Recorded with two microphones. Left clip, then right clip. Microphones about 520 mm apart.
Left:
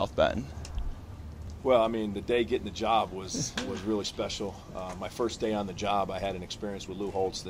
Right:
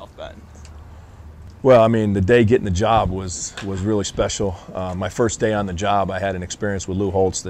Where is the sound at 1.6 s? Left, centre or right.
Right.